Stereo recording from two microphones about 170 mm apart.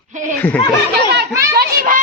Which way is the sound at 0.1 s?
50° right (ahead or behind).